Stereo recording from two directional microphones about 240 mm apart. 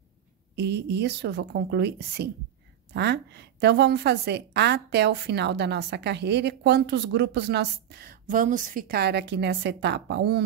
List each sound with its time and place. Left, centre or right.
0.6 s a woman's voice: right